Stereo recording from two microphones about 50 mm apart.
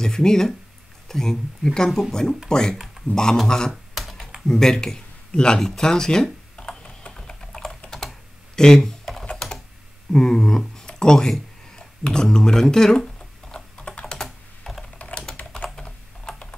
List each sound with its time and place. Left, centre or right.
0.0 s speech: centre
1.9 s speech: centre
2.5 s speech: centre
3.9 s computer keyboard: centre
4.5 s speech: centre
7.1 s typing: centre
8.5 s computer keyboard: centre
9.4 s typing: centre
10.1 s speech: centre
13.5 s typing: centre
15.0 s typing: left
15.6 s typing: centre